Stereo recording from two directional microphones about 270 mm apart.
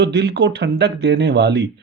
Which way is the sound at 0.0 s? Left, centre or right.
Right.